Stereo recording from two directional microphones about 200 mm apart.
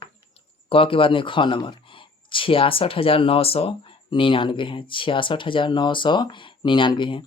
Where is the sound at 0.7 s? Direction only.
25° left (ahead or behind).